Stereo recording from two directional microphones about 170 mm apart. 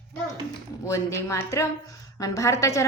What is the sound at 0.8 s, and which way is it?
A woman's voice, 15° left (ahead or behind).